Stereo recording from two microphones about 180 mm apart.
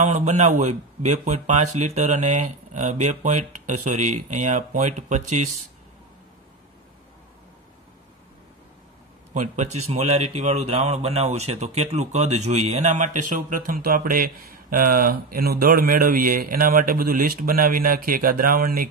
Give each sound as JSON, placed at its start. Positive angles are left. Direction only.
{"t": 0.0, "sound": "speech", "side_deg": -40}
{"t": 9.3, "sound": "speech", "side_deg": -40}